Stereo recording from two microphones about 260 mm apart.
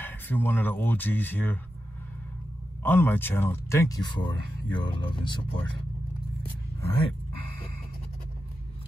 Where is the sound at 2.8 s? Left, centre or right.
Centre.